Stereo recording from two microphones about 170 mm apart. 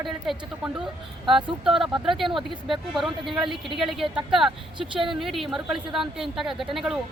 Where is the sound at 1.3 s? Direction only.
30° right (ahead or behind).